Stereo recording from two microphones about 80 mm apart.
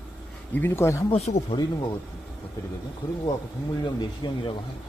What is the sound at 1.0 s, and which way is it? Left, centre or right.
Speech, left.